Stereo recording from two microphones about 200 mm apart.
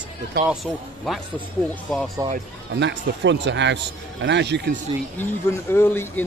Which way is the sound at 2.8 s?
60° right (ahead or behind).